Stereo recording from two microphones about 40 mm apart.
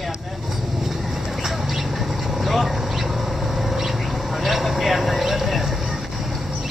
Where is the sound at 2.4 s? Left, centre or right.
Centre.